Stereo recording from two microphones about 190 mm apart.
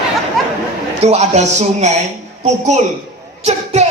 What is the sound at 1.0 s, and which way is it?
A child's voice, 35° right (ahead or behind).